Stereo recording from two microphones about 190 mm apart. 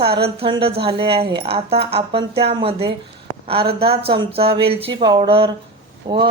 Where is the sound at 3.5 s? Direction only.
30° right (ahead or behind).